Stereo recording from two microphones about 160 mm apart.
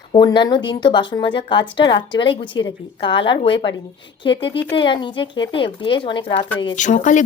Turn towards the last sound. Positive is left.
turn(degrees=50)  # may be behind; listen again after turning